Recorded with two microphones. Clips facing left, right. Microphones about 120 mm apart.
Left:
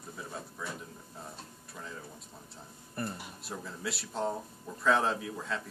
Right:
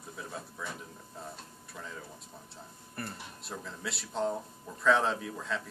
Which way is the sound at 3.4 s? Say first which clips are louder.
Left 1 dB; centre (ahead or behind).